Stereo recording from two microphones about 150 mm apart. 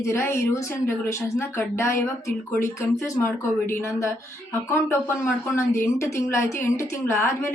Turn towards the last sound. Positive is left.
turn(degrees=15)  # may be behind; listen again after turning